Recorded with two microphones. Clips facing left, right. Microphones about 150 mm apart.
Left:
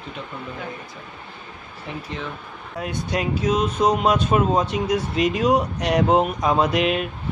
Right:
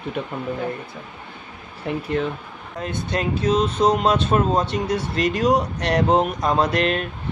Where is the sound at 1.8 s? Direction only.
60° right (ahead or behind).